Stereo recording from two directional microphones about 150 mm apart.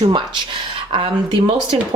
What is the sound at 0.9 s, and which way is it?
Speech, 40° right (ahead or behind).